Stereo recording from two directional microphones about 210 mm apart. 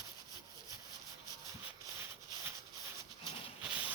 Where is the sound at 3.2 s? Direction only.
5° right (ahead or behind).